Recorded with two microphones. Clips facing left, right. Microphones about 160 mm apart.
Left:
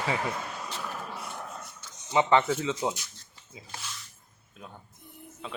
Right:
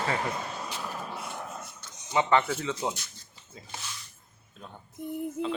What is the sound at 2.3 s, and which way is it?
Speech, 15° left (ahead or behind).